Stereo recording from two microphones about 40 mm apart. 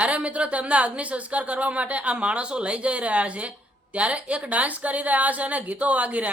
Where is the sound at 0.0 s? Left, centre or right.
Right.